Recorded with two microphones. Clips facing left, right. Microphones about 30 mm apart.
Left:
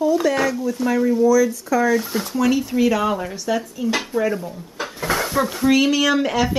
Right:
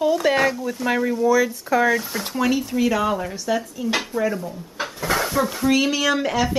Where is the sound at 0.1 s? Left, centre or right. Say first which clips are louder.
Even; right.